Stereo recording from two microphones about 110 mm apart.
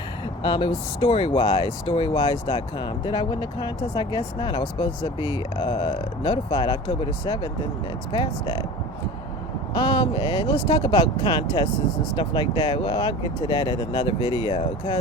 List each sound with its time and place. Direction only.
0.4 s speech: 45° left (ahead or behind)
9.7 s speech: 45° left (ahead or behind)